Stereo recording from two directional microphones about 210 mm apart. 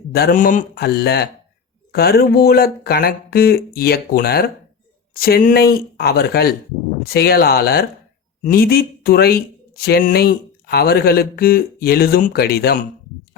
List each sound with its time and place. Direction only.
0.1 s speech: 45° left (ahead or behind)